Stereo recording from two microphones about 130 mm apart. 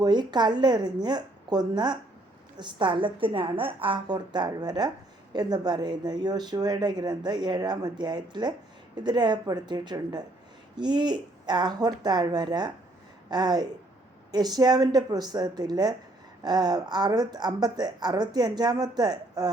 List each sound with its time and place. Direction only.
0.0 s speech: 35° right (ahead or behind)